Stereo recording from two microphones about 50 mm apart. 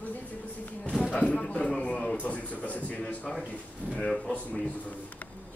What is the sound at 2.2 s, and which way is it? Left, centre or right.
A man's voice, left.